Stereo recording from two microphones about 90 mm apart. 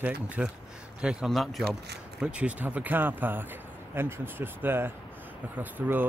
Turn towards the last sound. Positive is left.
turn(degrees=-20)  # may be behind; listen again after turning